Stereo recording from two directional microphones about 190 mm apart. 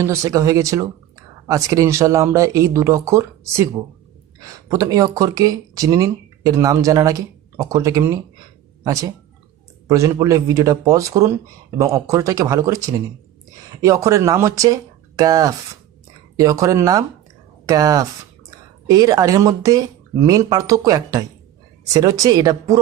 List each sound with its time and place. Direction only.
0.0 s speech: 15° right (ahead or behind)
4.7 s speech: 20° right (ahead or behind)